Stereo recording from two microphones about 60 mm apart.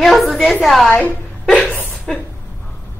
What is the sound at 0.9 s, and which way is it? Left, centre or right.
Speech, left.